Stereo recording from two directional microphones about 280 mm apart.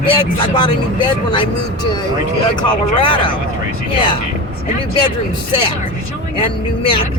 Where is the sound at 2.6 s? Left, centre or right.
Centre.